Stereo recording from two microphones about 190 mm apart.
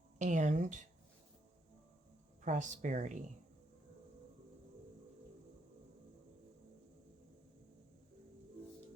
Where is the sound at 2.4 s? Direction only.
40° right (ahead or behind).